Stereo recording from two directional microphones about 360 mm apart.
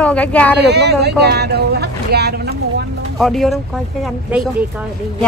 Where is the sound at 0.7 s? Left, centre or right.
Right.